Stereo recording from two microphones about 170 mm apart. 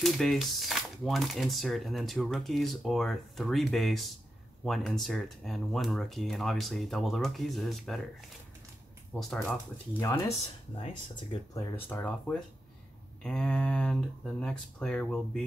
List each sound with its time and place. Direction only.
0.0 s speech: centre (ahead or behind)
9.1 s speech: centre (ahead or behind)
9.9 s speech: 15° left (ahead or behind)
11.9 s speech: 10° left (ahead or behind)